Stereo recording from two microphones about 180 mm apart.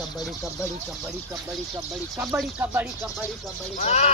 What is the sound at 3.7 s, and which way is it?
Speech, 40° left (ahead or behind).